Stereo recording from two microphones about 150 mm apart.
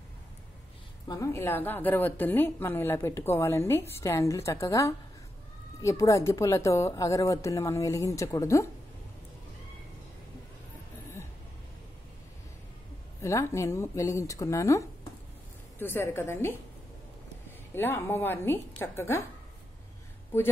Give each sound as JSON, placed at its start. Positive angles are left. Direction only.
{"t": 1.0, "sound": "a woman's voice", "side_deg": 20}
{"t": 13.2, "sound": "a woman's voice", "side_deg": 20}
{"t": 17.7, "sound": "a woman's voice", "side_deg": 15}